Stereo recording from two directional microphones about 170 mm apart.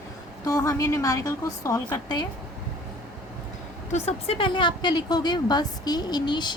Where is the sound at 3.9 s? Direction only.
40° left (ahead or behind).